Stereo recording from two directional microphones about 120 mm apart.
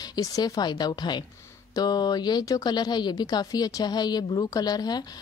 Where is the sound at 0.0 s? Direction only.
30° left (ahead or behind).